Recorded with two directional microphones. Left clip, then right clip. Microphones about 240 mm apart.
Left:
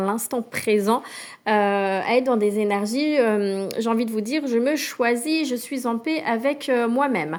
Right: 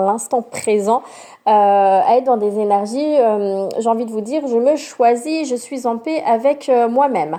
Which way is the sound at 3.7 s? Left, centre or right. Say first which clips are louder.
Right 9 dB; left.